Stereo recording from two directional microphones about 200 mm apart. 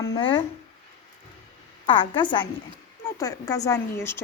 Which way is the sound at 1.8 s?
25° left (ahead or behind).